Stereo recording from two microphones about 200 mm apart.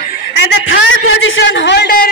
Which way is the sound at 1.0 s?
80° left.